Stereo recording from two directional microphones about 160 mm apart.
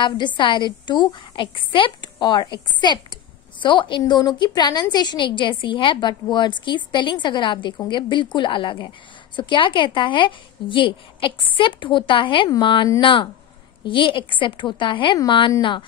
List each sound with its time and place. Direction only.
0.4 s a woman's voice: 30° left (ahead or behind)